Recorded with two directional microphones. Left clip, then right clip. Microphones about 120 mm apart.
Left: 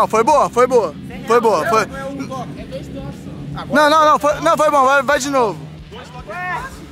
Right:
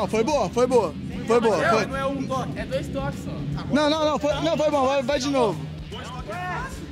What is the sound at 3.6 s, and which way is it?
Speech, 20° left (ahead or behind).